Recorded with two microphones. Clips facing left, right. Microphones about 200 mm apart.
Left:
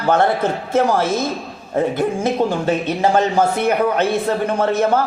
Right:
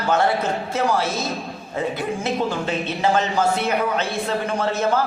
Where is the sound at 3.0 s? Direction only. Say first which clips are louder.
Left 3 dB; 50° left (ahead or behind).